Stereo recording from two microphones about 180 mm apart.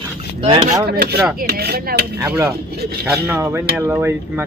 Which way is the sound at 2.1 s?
15° right (ahead or behind).